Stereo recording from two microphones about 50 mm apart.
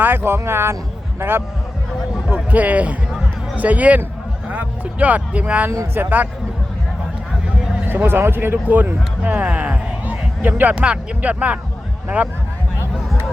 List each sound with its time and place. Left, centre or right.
0.0 s speech: right
2.3 s a man's voice: right
5.9 s speech: right
7.9 s speech: right
8.7 s speech: right
10.8 s speech: right